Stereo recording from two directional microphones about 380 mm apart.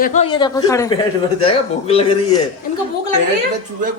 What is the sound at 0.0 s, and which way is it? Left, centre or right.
Speech, centre.